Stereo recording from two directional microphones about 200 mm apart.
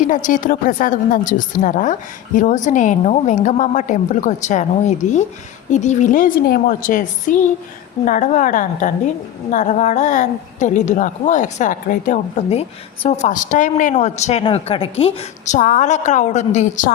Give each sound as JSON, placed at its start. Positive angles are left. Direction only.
{"t": 0.1, "sound": "a woman's voice", "side_deg": 40}